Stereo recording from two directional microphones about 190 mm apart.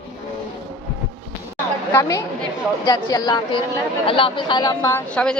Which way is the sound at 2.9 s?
20° left (ahead or behind).